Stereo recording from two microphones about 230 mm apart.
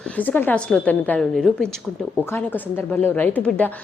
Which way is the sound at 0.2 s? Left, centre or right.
Centre.